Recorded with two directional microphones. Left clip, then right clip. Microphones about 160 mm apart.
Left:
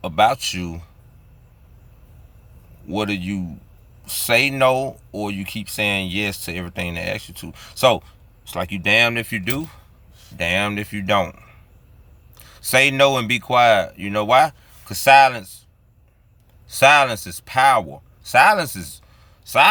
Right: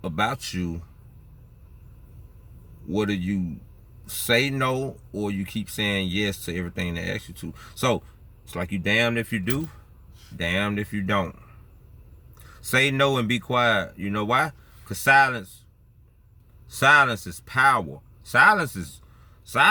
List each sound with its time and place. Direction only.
0.0 s speech: 15° left (ahead or behind)
3.0 s speech: 15° left (ahead or behind)
10.7 s speech: 15° left (ahead or behind)
12.4 s speech: 15° left (ahead or behind)
16.6 s speech: 15° left (ahead or behind)